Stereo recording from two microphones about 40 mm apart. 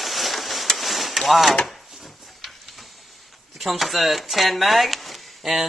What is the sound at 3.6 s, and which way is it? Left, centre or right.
Speech, centre.